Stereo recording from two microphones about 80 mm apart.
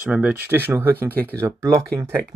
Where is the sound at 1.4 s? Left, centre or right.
Right.